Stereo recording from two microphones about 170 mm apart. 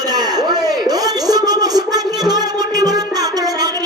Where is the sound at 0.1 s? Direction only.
25° right (ahead or behind).